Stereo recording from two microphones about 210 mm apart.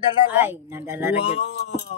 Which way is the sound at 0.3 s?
10° right (ahead or behind).